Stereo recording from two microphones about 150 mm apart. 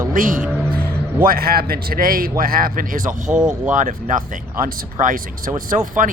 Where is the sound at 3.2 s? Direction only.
5° right (ahead or behind).